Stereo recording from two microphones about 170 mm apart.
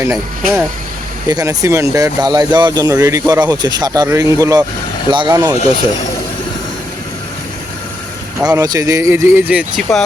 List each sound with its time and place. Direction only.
0.0 s speech: 15° right (ahead or behind)
8.4 s speech: 20° right (ahead or behind); by 10.0 s 5° right (ahead or behind)